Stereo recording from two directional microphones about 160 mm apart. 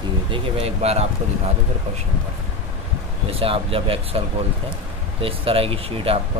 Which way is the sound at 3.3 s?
35° right (ahead or behind).